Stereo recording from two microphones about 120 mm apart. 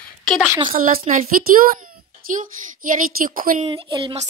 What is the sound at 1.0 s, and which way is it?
Speech, 90° right.